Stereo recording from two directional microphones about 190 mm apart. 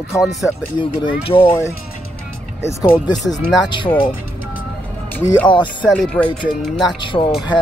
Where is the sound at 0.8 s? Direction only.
25° left (ahead or behind).